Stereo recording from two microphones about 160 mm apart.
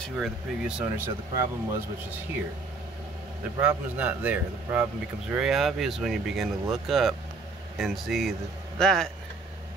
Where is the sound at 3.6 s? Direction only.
10° right (ahead or behind).